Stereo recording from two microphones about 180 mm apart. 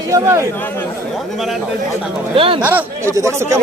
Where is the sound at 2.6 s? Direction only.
10° right (ahead or behind).